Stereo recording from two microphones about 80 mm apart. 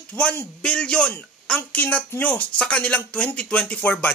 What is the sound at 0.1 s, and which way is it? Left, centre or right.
Speech, centre.